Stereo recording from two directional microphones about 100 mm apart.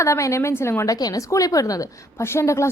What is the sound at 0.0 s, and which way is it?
A woman's voice, 30° left (ahead or behind).